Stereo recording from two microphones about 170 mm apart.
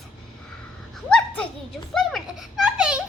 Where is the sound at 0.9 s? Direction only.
5° left (ahead or behind).